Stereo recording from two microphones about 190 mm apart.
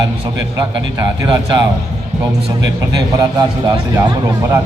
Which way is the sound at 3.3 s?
20° right (ahead or behind).